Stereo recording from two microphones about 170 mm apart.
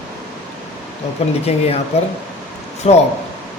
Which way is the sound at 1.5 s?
35° left (ahead or behind).